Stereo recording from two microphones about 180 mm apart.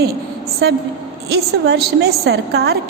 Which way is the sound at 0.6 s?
70° right (ahead or behind).